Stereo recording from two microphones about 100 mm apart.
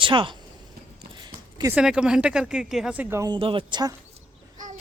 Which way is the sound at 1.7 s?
5° right (ahead or behind).